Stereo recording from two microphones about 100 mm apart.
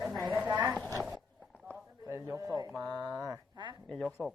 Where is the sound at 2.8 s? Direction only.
45° right (ahead or behind).